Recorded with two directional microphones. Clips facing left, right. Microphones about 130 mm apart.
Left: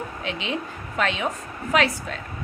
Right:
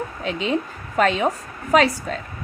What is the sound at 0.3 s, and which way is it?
A woman's voice, 40° right (ahead or behind).